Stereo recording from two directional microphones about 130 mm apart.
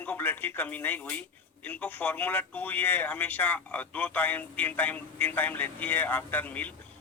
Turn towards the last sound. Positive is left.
turn(degrees=15)  # may be behind; listen again after turning